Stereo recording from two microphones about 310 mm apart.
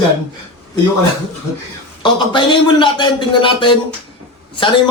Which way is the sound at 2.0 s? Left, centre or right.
Centre.